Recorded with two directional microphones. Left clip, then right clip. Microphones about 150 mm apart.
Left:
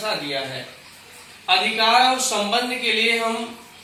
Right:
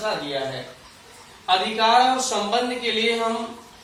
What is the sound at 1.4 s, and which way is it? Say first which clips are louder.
Speech: left 1 dB; 10° left (ahead or behind).